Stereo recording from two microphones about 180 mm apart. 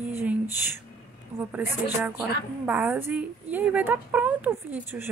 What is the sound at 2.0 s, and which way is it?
A woman's voice, 10° right (ahead or behind).